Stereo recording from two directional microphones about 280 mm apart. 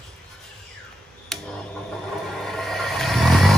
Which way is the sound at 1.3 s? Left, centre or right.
Centre.